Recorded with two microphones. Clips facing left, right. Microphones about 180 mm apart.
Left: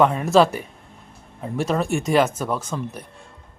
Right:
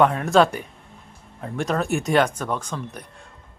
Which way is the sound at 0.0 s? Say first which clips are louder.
Left 1 dB; 5° left (ahead or behind).